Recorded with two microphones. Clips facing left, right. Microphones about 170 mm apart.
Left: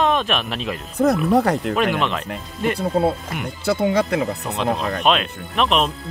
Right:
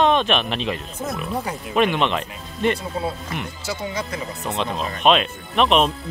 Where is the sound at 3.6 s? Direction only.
60° left (ahead or behind).